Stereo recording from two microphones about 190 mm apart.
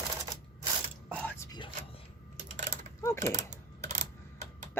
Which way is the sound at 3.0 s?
15° left (ahead or behind).